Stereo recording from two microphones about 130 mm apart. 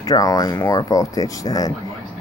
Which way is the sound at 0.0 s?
30° left (ahead or behind).